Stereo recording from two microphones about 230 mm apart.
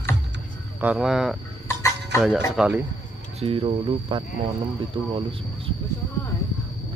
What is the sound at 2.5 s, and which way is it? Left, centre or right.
Speech, centre.